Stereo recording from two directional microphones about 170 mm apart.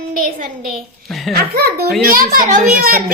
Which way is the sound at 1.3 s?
60° right (ahead or behind).